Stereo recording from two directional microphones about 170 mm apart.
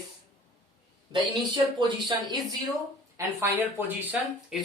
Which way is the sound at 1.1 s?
25° right (ahead or behind).